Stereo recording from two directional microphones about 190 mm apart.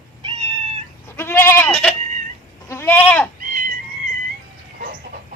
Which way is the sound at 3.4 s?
45° right (ahead or behind).